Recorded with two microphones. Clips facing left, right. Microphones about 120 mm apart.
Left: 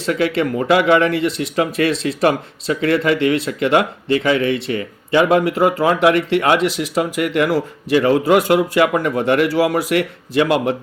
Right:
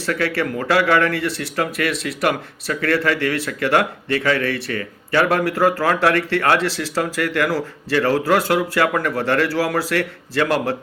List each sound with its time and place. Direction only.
0.0 s speech: 20° left (ahead or behind)